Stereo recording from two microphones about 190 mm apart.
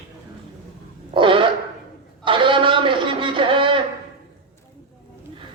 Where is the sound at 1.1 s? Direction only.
25° right (ahead or behind).